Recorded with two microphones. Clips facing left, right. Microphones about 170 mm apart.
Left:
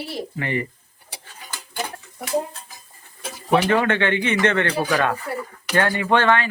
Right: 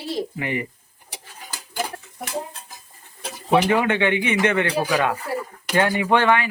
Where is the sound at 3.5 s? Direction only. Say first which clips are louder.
Even; 15° right (ahead or behind).